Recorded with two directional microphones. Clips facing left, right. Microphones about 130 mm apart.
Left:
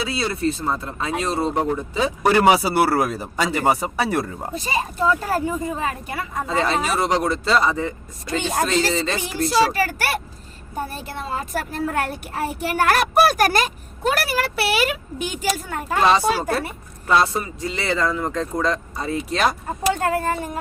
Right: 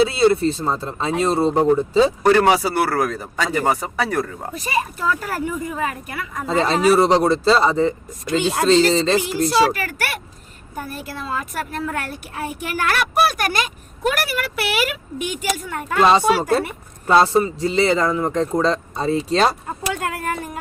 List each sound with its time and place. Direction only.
0.0 s speech: 25° right (ahead or behind)
2.2 s a woman's voice: 10° left (ahead or behind)
4.0 s a woman's voice: 25° left (ahead or behind)
6.5 s speech: 30° right (ahead or behind)
9.7 s a woman's voice: 35° left (ahead or behind)
16.0 s speech: 20° right (ahead or behind)
19.9 s speech: 35° left (ahead or behind)